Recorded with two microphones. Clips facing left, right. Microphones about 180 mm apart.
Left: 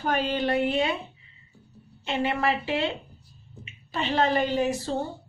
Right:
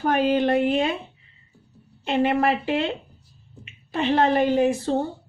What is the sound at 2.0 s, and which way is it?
Speech, 50° right (ahead or behind).